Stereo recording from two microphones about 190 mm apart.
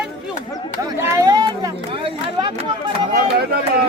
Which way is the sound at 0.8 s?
15° right (ahead or behind).